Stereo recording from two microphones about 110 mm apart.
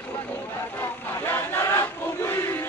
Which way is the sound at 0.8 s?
25° left (ahead or behind).